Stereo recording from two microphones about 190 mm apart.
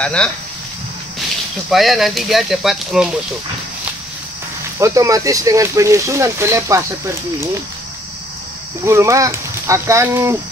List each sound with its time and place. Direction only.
0.0 s speech: 5° left (ahead or behind)
1.7 s speech: centre (ahead or behind)
4.7 s speech: 15° right (ahead or behind)
8.8 s speech: 15° right (ahead or behind)